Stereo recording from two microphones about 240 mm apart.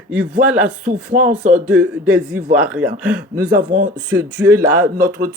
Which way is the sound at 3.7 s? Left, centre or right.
Right.